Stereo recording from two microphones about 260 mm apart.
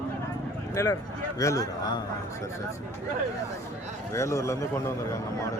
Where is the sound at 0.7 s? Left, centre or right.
Centre.